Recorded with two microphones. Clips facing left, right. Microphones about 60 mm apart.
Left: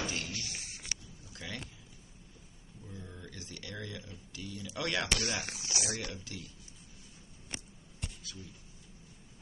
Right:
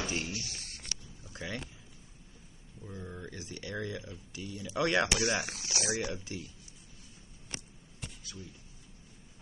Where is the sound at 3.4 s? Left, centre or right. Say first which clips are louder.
Right 5 dB; centre.